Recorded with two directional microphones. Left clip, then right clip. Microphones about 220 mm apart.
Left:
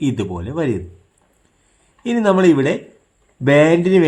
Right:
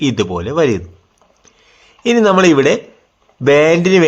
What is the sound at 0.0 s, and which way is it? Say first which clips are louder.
Speech: right 6 dB; 10° right (ahead or behind).